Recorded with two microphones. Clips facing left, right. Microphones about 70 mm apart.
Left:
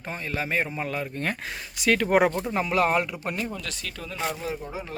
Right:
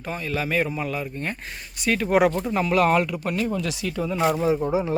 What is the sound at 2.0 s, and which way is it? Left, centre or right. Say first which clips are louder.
Speech: right 3 dB; left.